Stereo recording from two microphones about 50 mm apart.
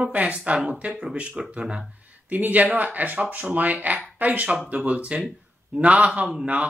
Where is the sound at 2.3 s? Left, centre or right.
Right.